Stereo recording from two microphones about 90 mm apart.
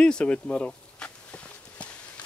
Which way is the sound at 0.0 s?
10° left (ahead or behind).